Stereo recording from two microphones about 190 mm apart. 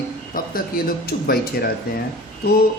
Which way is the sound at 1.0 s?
55° left (ahead or behind).